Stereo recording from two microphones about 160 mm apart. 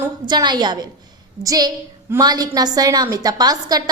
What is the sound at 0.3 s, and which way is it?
A woman's voice, 25° right (ahead or behind).